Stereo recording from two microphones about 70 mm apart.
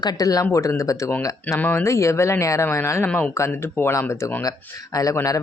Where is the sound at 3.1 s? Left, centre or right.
Centre.